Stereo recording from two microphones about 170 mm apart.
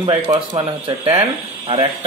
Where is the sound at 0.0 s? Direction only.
30° right (ahead or behind).